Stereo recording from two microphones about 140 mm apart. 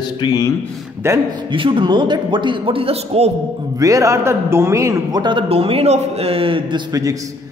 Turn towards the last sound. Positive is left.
turn(degrees=-25)  # may be behind; listen again after turning